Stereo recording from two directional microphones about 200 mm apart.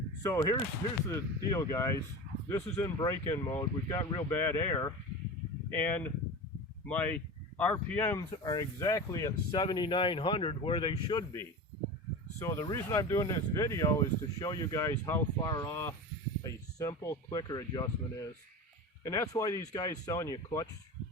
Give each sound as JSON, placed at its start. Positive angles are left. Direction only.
{"t": 0.2, "sound": "speech", "side_deg": 15}
{"t": 19.0, "sound": "speech", "side_deg": 15}